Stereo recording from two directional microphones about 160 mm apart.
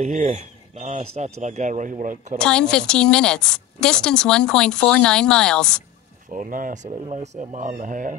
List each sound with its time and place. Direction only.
0.0 s speech: 45° right (ahead or behind)
2.3 s a woman's voice: 5° left (ahead or behind)
6.3 s speech: 55° right (ahead or behind)